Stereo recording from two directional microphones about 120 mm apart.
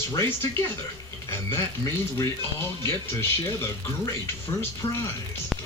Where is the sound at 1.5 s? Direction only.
25° left (ahead or behind).